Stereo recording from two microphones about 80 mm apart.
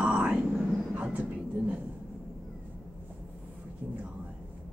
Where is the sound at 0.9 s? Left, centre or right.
Centre.